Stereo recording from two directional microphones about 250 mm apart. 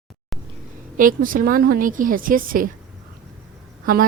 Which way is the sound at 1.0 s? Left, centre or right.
Right.